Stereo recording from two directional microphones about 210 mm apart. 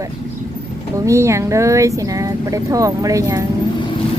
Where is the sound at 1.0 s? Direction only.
15° right (ahead or behind).